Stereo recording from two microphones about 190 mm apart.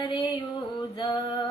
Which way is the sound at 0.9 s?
25° left (ahead or behind).